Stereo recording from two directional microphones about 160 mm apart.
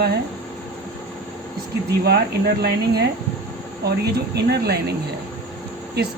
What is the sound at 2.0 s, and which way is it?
Speech, 90° right.